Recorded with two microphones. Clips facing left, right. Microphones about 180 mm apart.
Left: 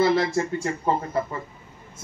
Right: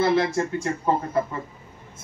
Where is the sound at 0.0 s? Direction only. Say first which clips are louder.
Even; 55° right (ahead or behind).